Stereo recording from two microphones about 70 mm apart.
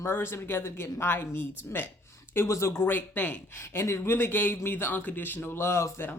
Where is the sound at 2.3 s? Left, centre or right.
Left.